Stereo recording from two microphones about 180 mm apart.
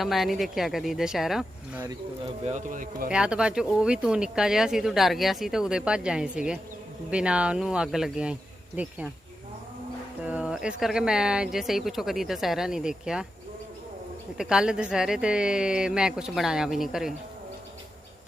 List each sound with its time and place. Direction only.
0.0 s speech: centre (ahead or behind)
2.4 s speech: 45° right (ahead or behind)
3.1 s speech: 5° right (ahead or behind)
10.2 s speech: 5° right (ahead or behind)
14.3 s speech: 5° right (ahead or behind)